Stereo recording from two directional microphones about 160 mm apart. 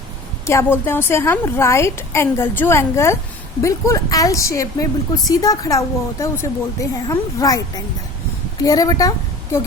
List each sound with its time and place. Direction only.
0.4 s a woman's voice: 15° left (ahead or behind)
8.6 s speech: 20° left (ahead or behind)